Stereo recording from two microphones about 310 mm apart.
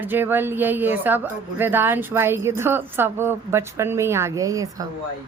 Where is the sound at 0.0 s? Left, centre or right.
Centre.